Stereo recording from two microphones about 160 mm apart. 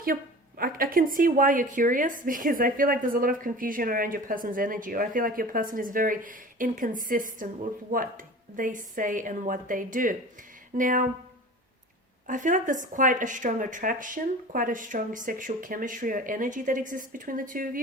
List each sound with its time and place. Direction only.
0.6 s speech: 60° right (ahead or behind)
8.5 s speech: 55° right (ahead or behind)
12.3 s speech: 55° right (ahead or behind)